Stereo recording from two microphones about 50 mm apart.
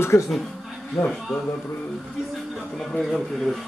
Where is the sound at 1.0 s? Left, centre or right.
Left.